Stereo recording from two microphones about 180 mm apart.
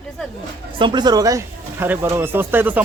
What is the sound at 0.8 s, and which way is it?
A man's voice, 25° right (ahead or behind).